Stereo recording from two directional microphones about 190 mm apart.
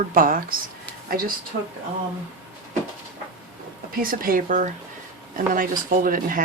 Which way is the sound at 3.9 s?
50° right (ahead or behind).